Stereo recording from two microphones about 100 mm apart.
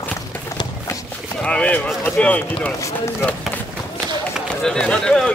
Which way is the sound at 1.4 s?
10° left (ahead or behind).